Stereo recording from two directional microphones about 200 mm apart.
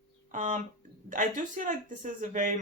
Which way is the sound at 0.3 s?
40° right (ahead or behind).